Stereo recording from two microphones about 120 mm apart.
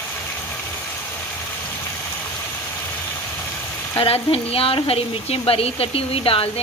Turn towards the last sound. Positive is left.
turn(degrees=50)  # may be behind; listen again after turning